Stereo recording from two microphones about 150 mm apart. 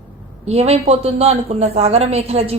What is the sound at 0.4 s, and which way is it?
A woman's voice, 45° right (ahead or behind).